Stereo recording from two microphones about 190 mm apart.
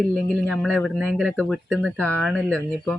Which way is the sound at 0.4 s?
Centre (ahead or behind).